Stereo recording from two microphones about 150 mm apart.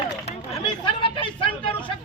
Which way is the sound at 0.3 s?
45° left (ahead or behind).